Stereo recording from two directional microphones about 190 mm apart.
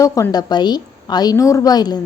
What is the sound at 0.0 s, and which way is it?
A woman's voice, 15° left (ahead or behind).